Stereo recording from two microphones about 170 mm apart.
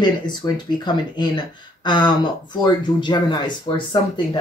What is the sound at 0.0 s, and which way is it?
Speech, 25° left (ahead or behind).